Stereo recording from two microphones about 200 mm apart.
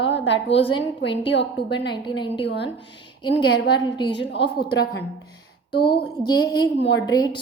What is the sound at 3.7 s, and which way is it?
Speech, 20° left (ahead or behind).